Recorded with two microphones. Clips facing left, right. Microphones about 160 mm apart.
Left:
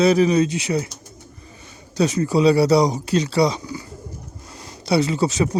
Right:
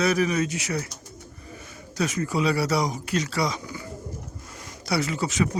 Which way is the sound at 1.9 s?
30° left (ahead or behind).